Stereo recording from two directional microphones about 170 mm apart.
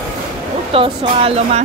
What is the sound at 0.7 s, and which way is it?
Speech, 35° right (ahead or behind).